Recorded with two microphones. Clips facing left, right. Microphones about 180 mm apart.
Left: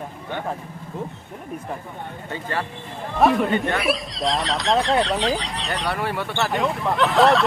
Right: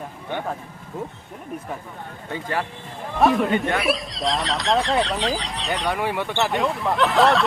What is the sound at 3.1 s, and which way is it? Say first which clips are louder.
Speech: even; centre (ahead or behind).